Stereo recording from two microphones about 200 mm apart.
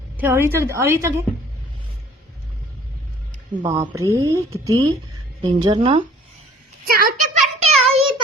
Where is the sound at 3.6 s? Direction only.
15° right (ahead or behind).